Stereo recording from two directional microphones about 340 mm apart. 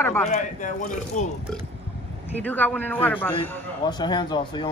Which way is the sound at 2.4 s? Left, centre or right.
Centre.